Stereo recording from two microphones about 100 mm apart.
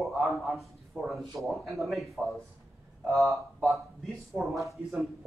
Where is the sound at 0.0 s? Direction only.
Centre (ahead or behind).